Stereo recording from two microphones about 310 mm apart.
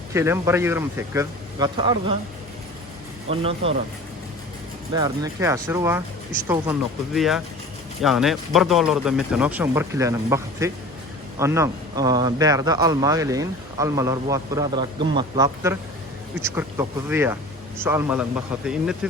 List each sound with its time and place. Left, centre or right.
0.1 s speech: centre
3.2 s speech: centre
4.9 s speech: centre